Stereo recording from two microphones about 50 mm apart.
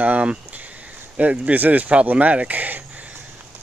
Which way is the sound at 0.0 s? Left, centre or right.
Right.